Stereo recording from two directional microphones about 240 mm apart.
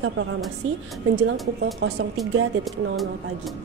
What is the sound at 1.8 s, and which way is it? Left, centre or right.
Speech, right.